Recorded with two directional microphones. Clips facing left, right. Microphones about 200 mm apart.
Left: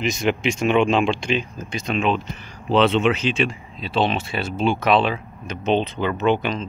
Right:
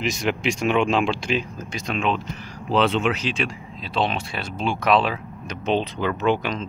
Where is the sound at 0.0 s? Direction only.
Centre (ahead or behind).